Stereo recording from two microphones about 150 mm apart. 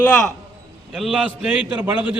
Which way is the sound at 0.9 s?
5° right (ahead or behind).